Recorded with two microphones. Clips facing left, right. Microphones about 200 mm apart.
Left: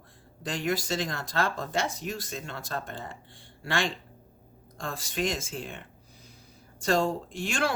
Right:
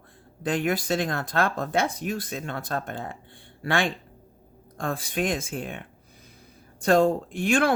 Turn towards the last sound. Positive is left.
turn(degrees=-55)  # may be behind; listen again after turning